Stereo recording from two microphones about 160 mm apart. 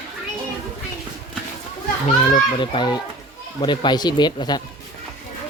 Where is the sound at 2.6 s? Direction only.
30° left (ahead or behind).